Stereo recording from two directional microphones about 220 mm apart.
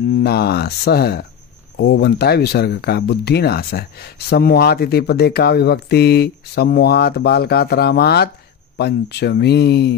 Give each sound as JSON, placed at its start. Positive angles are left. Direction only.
{"t": 0.2, "sound": "speech", "side_deg": 45}